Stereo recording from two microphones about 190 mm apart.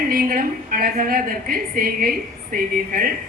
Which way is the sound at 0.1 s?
50° right (ahead or behind).